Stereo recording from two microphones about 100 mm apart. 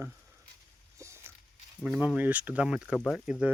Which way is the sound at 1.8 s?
10° right (ahead or behind).